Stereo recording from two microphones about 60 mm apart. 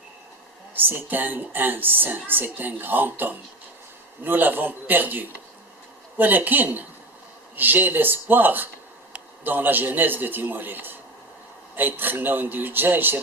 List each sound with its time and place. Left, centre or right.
0.8 s a woman's voice: right